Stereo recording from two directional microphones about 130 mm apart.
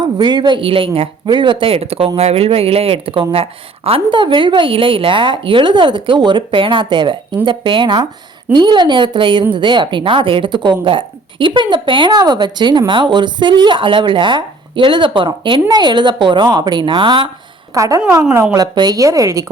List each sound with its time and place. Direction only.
0.0 s speech: 35° right (ahead or behind)
17.7 s speech: 25° right (ahead or behind)